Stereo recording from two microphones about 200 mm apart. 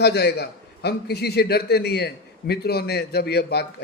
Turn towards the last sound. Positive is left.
turn(degrees=55)  # may be behind; listen again after turning